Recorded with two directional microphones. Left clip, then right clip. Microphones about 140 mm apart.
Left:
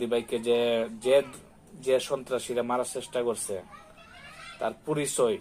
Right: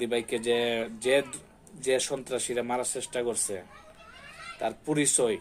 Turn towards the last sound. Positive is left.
turn(degrees=-25)  # may be behind; listen again after turning